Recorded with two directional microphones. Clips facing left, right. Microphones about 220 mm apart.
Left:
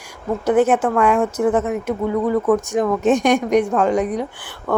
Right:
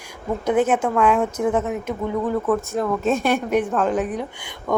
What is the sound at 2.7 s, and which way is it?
Speech, 85° left.